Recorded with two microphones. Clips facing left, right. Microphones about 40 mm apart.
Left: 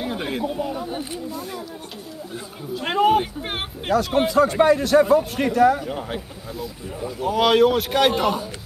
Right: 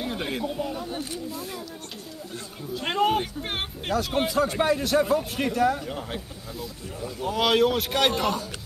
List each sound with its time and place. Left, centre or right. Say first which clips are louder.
0.0 s speech: left 4 dB; centre
2.7 s speech: left 5 dB; centre